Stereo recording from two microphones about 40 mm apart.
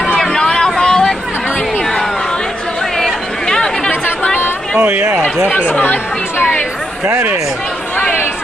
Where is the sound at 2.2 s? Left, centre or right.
Centre.